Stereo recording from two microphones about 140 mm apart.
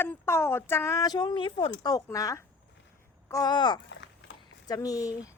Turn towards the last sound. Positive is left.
turn(degrees=25)  # may be behind; listen again after turning